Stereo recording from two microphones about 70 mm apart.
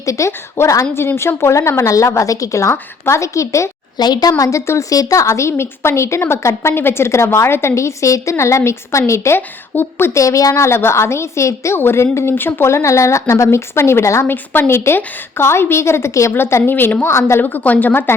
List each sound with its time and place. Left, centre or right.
0.0 s a woman's voice: left
3.9 s a woman's voice: left
4.3 s a woman's voice: left
4.9 s a woman's voice: left
9.7 s a woman's voice: left
10.2 s a woman's voice: left
14.3 s speech: left
17.4 s a woman's voice: left